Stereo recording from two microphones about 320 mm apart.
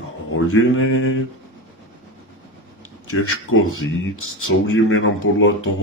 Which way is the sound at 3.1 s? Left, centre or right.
Left.